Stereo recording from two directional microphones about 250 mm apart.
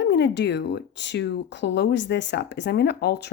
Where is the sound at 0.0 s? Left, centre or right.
Left.